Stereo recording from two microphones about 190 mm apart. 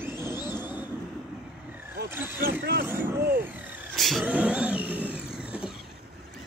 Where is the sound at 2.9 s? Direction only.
10° right (ahead or behind).